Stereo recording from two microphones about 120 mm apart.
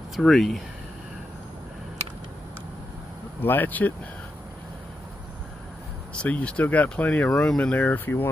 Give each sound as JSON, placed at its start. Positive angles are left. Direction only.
{"t": 0.1, "sound": "speech", "side_deg": 0}
{"t": 3.4, "sound": "speech", "side_deg": 15}
{"t": 6.2, "sound": "speech", "side_deg": 10}